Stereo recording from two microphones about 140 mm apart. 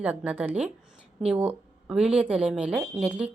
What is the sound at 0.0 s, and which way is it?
Speech, 10° right (ahead or behind).